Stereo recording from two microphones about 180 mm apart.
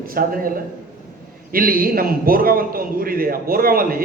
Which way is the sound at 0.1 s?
50° right (ahead or behind).